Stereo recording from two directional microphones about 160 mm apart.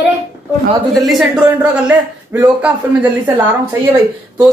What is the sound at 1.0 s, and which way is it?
A man's voice, centre (ahead or behind).